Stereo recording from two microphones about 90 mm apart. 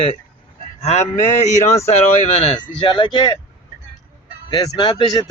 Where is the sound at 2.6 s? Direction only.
65° left (ahead or behind).